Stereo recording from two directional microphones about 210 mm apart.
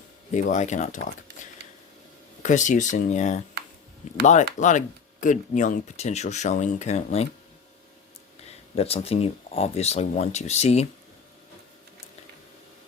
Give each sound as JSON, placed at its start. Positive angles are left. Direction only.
{"t": 0.3, "sound": "speech", "side_deg": 35}
{"t": 2.4, "sound": "speech", "side_deg": 35}
{"t": 4.6, "sound": "speech", "side_deg": 35}
{"t": 8.4, "sound": "speech", "side_deg": 30}